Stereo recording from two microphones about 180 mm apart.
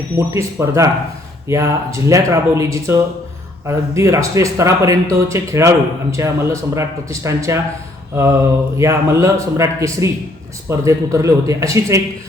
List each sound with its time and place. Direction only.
0.3 s speech: 15° right (ahead or behind)